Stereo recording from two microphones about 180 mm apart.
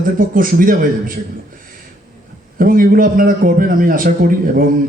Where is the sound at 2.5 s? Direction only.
50° right (ahead or behind).